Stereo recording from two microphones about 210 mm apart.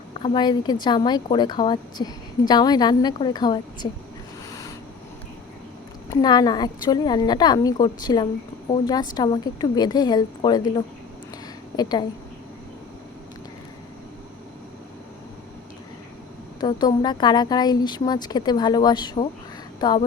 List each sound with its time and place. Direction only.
0.2 s a woman's voice: 20° left (ahead or behind)
6.1 s a woman's voice: 20° left (ahead or behind)
16.6 s a woman's voice: 20° left (ahead or behind)